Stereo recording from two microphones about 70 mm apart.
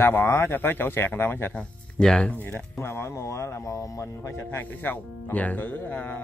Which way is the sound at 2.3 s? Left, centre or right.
Left.